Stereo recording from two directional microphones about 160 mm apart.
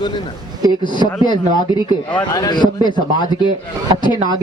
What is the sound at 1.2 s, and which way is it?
A man's voice, 30° left (ahead or behind).